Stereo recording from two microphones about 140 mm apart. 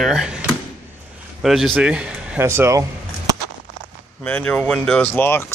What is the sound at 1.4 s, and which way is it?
A man's voice, centre (ahead or behind).